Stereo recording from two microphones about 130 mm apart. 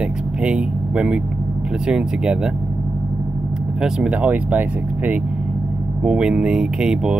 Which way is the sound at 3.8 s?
10° right (ahead or behind).